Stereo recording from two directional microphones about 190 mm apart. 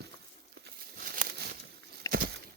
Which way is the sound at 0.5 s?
60° right (ahead or behind).